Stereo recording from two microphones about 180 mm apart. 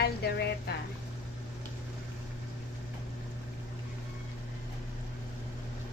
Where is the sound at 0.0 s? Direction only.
60° left (ahead or behind).